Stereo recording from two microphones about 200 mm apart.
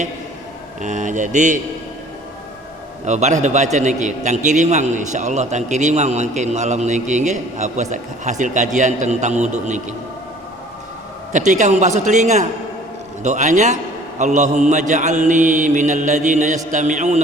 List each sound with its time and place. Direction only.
0.8 s a man's voice: 40° right (ahead or behind)
3.0 s a man's voice: 35° right (ahead or behind)
11.3 s a man's voice: 40° right (ahead or behind)